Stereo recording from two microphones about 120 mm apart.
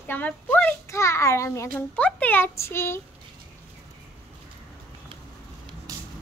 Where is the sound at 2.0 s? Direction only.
10° left (ahead or behind).